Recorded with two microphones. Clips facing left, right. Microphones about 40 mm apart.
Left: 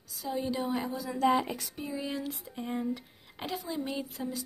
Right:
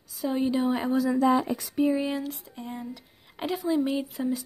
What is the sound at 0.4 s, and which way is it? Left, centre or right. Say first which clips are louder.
Speech: right 6 dB; right.